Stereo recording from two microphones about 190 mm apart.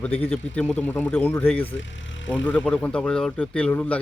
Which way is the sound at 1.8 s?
75° left (ahead or behind).